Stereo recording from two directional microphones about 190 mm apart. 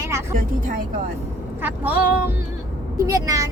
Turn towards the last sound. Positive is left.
turn(degrees=-15)  # may be behind; listen again after turning